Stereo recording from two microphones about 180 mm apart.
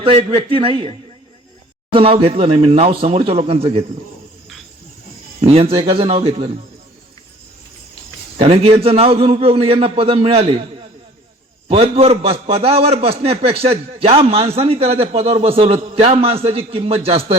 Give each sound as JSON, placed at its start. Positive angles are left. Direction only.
{"t": 0.0, "sound": "a man's voice", "side_deg": -35}
{"t": 5.4, "sound": "a man's voice", "side_deg": -35}
{"t": 8.4, "sound": "a man's voice", "side_deg": -35}
{"t": 11.7, "sound": "a man's voice", "side_deg": -35}